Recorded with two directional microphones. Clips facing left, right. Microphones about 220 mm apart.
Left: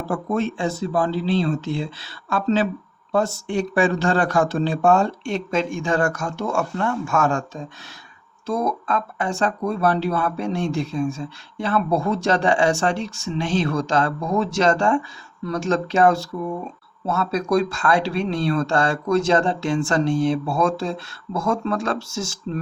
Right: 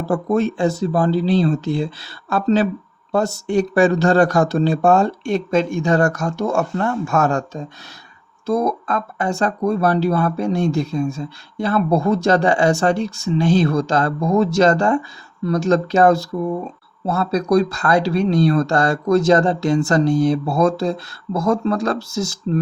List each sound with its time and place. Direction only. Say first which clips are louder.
0.1 s speech: right 5 dB; 40° right (ahead or behind)